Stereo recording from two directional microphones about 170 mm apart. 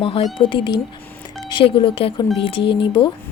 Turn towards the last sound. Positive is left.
turn(degrees=30)  # may be behind; listen again after turning